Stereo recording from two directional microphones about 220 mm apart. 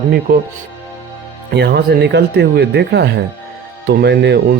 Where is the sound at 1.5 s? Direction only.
45° right (ahead or behind).